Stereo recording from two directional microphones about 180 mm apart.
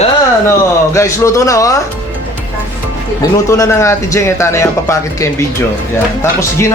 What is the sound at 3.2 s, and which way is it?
Speech, 15° left (ahead or behind).